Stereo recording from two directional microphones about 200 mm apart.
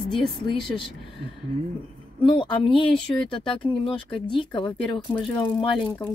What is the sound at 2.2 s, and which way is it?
Speech, 25° left (ahead or behind).